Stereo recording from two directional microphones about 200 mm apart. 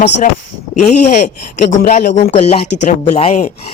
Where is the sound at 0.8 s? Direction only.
35° left (ahead or behind).